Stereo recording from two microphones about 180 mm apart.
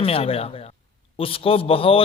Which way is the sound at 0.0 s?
30° left (ahead or behind).